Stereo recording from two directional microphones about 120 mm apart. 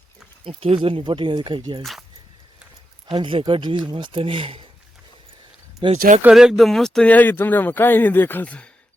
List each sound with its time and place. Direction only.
0.4 s speech: 50° right (ahead or behind)
1.8 s speech: centre (ahead or behind)
3.1 s speech: 45° right (ahead or behind)
5.9 s speech: 70° right (ahead or behind)
6.2 s speech: 5° right (ahead or behind)